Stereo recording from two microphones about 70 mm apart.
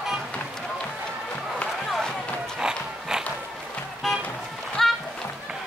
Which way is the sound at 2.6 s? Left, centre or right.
Centre.